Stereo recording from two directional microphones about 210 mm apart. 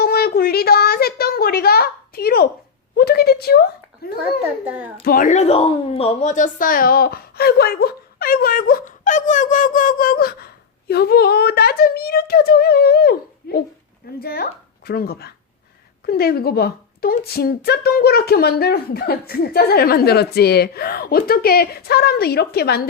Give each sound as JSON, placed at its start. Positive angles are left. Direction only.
{"t": 0.0, "sound": "a sound", "side_deg": 45}
{"t": 3.0, "sound": "speech", "side_deg": 50}
{"t": 4.6, "sound": "a child's voice", "side_deg": -5}
{"t": 5.0, "sound": "speech", "side_deg": 40}